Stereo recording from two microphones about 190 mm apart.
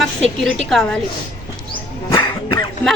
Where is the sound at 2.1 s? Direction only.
20° left (ahead or behind).